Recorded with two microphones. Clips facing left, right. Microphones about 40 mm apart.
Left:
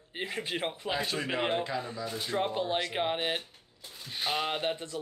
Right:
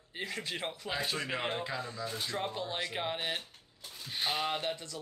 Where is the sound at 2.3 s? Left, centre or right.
Left.